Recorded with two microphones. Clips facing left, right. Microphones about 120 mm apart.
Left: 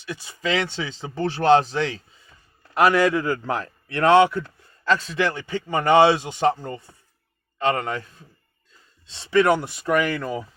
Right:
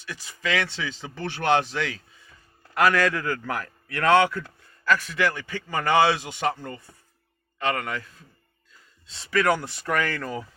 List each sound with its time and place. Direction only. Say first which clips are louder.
0.0 s speech: left 4 dB; 20° left (ahead or behind)